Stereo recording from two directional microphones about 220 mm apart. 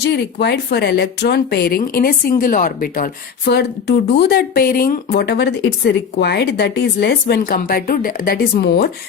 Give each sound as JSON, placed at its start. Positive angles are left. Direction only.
{"t": 0.0, "sound": "speech", "side_deg": 50}